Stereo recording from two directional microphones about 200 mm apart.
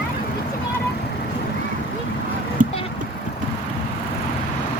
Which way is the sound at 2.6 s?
40° right (ahead or behind).